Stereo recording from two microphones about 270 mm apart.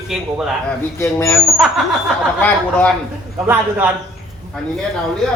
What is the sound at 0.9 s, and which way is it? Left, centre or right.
Speech, centre.